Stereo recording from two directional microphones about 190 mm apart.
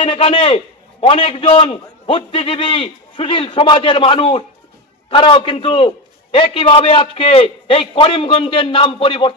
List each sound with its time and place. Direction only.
0.0 s a man's voice: 25° left (ahead or behind)